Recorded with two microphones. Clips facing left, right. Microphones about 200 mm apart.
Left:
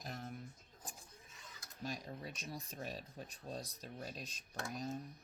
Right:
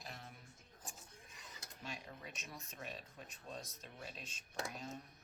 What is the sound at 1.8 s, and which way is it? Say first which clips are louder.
Speech: left 6 dB; 40° left (ahead or behind).